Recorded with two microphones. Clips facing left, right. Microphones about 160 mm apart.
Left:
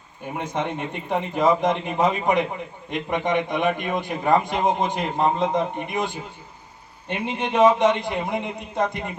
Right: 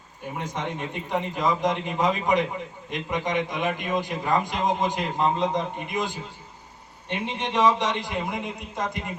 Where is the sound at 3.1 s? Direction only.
60° left (ahead or behind).